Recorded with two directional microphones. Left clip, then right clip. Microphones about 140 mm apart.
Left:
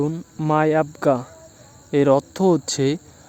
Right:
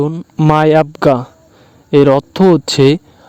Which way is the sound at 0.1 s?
60° right (ahead or behind).